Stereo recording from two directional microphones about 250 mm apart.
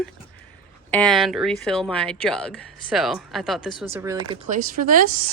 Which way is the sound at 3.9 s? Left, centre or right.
Centre.